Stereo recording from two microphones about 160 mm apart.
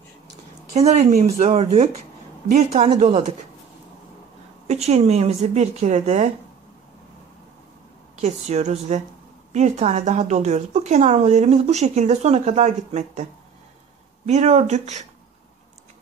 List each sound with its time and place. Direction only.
0.7 s speech: 45° right (ahead or behind)
4.6 s speech: 40° right (ahead or behind)
8.2 s speech: 45° right (ahead or behind)